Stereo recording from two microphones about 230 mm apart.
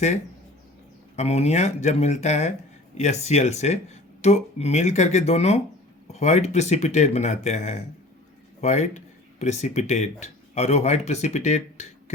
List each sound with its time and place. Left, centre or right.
1.1 s speech: left